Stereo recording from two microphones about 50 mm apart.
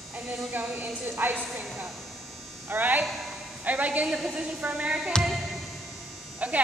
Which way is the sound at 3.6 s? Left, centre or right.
Right.